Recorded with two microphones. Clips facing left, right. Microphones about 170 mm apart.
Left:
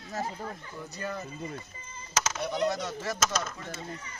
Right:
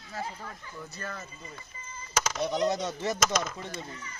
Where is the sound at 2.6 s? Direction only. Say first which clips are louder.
Right 2 dB; 20° right (ahead or behind).